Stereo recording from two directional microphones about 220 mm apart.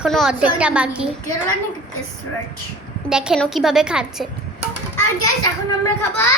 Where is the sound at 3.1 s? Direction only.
5° right (ahead or behind).